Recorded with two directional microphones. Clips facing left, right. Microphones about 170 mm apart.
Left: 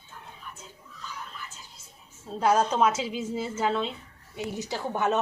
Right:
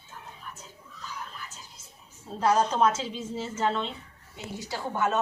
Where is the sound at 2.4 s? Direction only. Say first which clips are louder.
Left 1 dB; 10° left (ahead or behind).